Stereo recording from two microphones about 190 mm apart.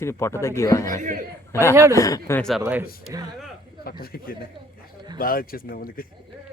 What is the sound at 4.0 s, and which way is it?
Speech, 50° left (ahead or behind).